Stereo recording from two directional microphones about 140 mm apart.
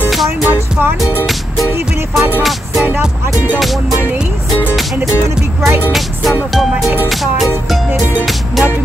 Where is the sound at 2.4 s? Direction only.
Centre (ahead or behind).